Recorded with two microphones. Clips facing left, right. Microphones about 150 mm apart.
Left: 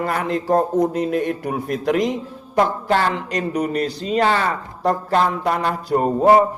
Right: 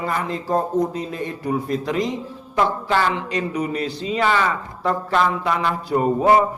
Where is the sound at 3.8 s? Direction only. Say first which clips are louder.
Left 3 dB; 40° left (ahead or behind).